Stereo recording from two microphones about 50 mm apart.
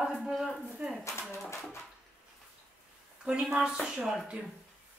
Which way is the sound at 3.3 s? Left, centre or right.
Right.